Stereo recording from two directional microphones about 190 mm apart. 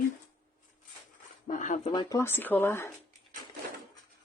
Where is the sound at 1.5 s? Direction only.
40° left (ahead or behind).